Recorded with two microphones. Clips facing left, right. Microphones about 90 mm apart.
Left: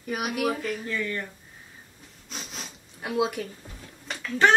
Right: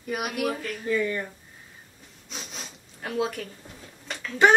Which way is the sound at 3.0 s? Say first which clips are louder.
Left 2 dB; 10° left (ahead or behind).